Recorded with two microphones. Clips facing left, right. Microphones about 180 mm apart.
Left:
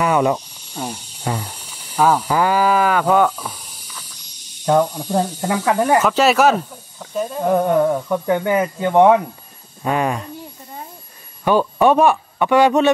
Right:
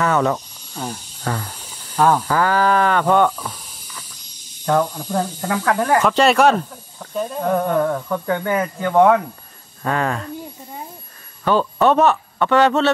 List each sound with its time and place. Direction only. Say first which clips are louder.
0.0 s speech: left 2 dB; 15° left (ahead or behind)
4.6 s speech: left 2 dB; 20° left (ahead or behind)
5.9 s speech: right 3 dB; centre (ahead or behind)
7.5 s speech: left 3 dB; 15° left (ahead or behind)
11.4 s speech: left 2 dB; 10° left (ahead or behind)